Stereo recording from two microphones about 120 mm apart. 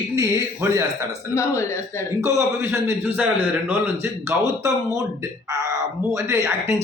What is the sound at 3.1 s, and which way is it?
Speech, 15° right (ahead or behind).